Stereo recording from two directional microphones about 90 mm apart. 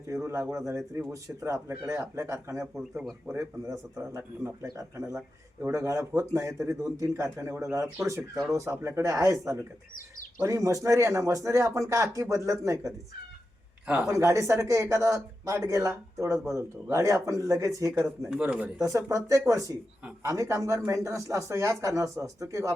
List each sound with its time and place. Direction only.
0.1 s speech: 35° right (ahead or behind)
3.0 s a man's voice: 5° right (ahead or behind)
3.3 s speech: 35° right (ahead or behind)
13.8 s speech: 15° right (ahead or behind)
14.1 s speech: 35° right (ahead or behind)
18.3 s a man's voice: 10° right (ahead or behind)
18.8 s speech: 40° right (ahead or behind)